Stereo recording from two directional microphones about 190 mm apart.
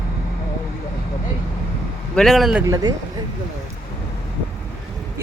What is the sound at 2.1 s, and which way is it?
Speech, centre (ahead or behind).